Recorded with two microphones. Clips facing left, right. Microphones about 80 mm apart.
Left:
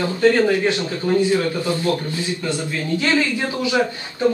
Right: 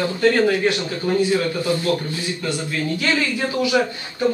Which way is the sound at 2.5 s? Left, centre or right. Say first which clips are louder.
Even; left.